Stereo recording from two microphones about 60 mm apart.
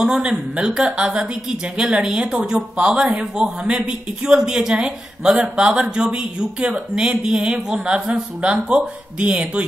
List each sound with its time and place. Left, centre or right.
0.0 s speech: centre